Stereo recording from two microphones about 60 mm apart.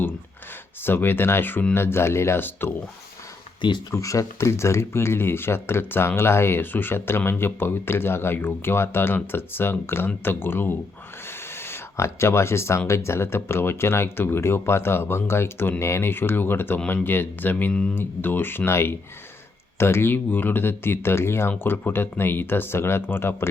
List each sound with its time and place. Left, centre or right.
0.8 s speech: left
3.9 s speech: left
11.3 s a sound: left
12.9 s speech: left